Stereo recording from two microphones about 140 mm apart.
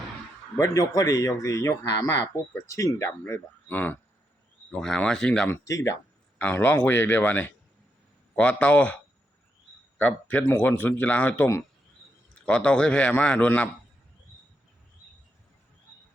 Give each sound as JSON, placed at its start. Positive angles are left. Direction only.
{"t": 0.6, "sound": "a man's voice", "side_deg": 25}
{"t": 5.5, "sound": "a man's voice", "side_deg": 20}
{"t": 10.0, "sound": "a man's voice", "side_deg": 10}